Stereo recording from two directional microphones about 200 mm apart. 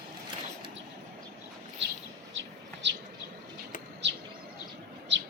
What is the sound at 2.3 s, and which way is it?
Bird, 65° right (ahead or behind).